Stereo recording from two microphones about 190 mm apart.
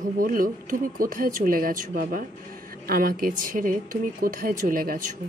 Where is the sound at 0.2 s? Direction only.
45° right (ahead or behind).